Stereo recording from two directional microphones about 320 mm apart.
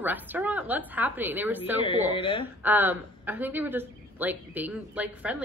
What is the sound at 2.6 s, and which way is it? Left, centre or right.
A woman's voice, centre.